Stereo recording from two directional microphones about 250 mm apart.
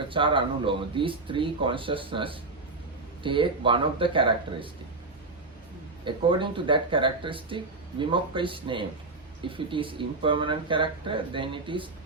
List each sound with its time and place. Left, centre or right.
0.1 s speech: centre
6.1 s speech: centre